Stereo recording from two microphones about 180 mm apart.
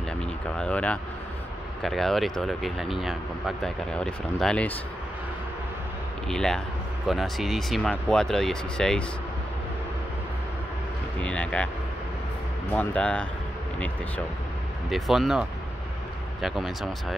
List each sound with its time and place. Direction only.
0.6 s speech: 5° left (ahead or behind)
6.2 s speech: 5° left (ahead or behind)
11.1 s speech: 5° left (ahead or behind)
12.7 s speech: 5° left (ahead or behind)
14.9 s speech: centre (ahead or behind)